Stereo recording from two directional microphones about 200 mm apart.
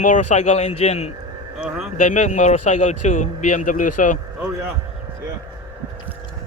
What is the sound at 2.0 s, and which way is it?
A man's voice, 40° left (ahead or behind).